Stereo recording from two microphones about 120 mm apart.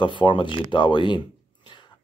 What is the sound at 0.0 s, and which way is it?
Speech, 40° left (ahead or behind).